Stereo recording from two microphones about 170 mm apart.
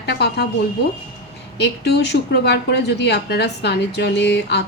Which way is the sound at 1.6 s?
80° left.